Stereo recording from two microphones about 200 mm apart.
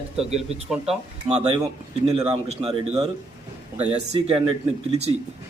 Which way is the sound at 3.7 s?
30° right (ahead or behind).